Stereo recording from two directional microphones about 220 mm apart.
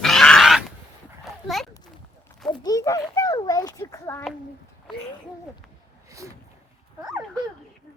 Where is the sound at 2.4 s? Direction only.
15° left (ahead or behind).